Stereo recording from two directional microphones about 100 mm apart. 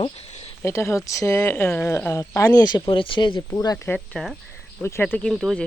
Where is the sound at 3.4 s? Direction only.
35° left (ahead or behind).